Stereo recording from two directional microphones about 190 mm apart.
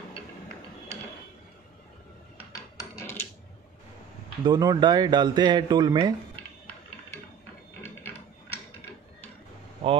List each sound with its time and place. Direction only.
2.8 s wood: 15° left (ahead or behind)
4.4 s speech: 20° right (ahead or behind)